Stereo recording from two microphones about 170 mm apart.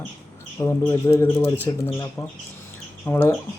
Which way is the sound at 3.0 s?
10° left (ahead or behind).